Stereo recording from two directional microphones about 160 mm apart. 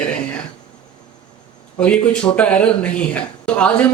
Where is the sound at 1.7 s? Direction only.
5° left (ahead or behind).